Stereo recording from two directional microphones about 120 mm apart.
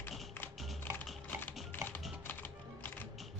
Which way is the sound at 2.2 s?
15° left (ahead or behind).